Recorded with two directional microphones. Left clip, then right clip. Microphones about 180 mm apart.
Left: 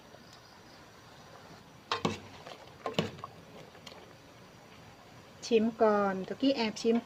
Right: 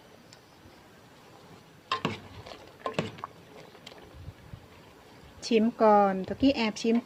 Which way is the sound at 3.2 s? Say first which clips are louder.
Right 5 dB; 10° right (ahead or behind).